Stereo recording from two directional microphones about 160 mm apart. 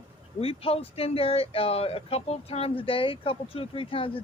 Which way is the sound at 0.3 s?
35° left (ahead or behind).